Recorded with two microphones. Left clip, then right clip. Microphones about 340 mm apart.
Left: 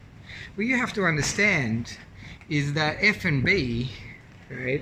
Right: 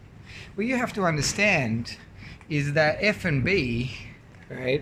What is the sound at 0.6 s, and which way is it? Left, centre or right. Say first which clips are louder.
Speech: left 1 dB; centre.